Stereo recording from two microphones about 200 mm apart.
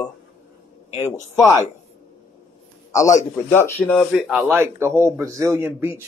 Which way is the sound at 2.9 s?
15° left (ahead or behind).